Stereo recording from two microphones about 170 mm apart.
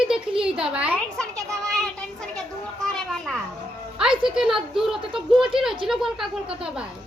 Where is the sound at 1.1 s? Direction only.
5° left (ahead or behind).